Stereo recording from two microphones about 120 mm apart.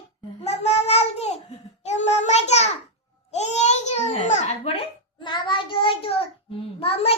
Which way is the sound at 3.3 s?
70° left (ahead or behind).